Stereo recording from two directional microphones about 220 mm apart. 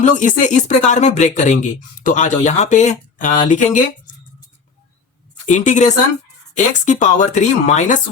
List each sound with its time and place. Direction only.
0.0 s speech: 35° left (ahead or behind)
5.5 s speech: 35° left (ahead or behind)